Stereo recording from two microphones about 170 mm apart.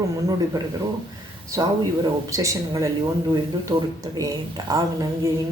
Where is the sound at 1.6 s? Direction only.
20° right (ahead or behind).